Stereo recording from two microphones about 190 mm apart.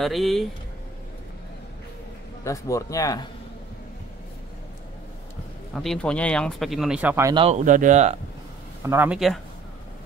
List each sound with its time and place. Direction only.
0.0 s speech: centre (ahead or behind)
2.4 s a man's voice: 15° left (ahead or behind)
5.8 s speech: 5° left (ahead or behind)
7.3 s speech: 35° right (ahead or behind)
8.8 s speech: 10° right (ahead or behind)